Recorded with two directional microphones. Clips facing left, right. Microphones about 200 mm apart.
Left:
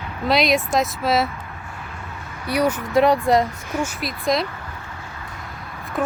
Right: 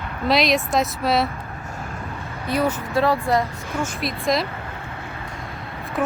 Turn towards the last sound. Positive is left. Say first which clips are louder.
# even
turn(degrees=0)  # may be behind; listen again after turning